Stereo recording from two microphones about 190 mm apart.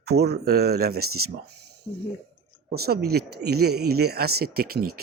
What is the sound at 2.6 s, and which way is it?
A man's voice, 55° right (ahead or behind).